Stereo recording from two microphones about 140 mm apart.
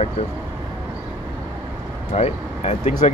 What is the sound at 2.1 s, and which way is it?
Speech, 50° left (ahead or behind).